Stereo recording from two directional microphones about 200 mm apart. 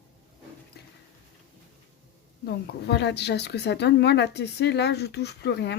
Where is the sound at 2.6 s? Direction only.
55° left (ahead or behind).